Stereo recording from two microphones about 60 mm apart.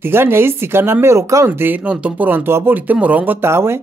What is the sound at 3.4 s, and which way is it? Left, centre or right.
Speech, right.